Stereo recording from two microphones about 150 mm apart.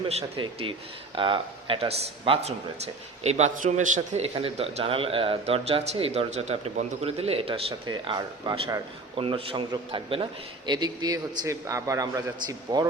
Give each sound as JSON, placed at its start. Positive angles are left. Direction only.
{"t": 0.1, "sound": "a man's voice", "side_deg": -40}